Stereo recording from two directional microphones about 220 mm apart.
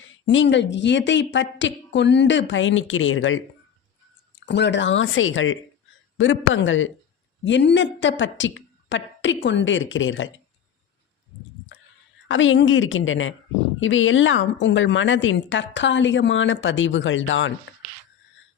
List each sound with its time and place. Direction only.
0.3 s a woman's voice: 55° left (ahead or behind)
4.4 s a woman's voice: 50° left (ahead or behind)
12.3 s a woman's voice: 60° left (ahead or behind)